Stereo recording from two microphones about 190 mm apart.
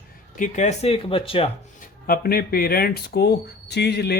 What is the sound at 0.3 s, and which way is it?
Speech, 40° left (ahead or behind).